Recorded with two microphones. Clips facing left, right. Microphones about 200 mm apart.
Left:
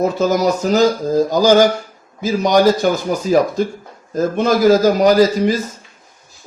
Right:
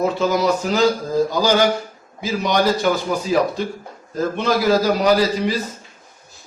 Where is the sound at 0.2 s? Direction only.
45° left (ahead or behind).